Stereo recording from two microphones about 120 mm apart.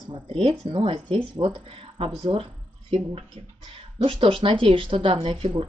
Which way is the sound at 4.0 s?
45° right (ahead or behind).